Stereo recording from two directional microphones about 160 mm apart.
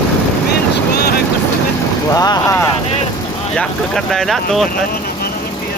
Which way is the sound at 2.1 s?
20° left (ahead or behind).